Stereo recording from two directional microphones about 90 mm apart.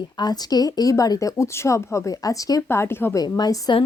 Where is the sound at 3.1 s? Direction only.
50° left (ahead or behind).